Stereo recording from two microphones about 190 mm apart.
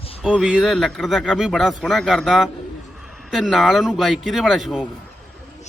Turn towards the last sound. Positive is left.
turn(degrees=0)  # may be behind; listen again after turning